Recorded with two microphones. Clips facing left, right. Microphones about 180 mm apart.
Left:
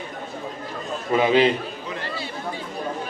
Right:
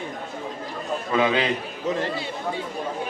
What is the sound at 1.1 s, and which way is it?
Speech, 30° left (ahead or behind).